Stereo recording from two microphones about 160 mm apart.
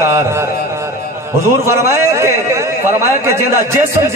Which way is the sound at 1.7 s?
15° right (ahead or behind).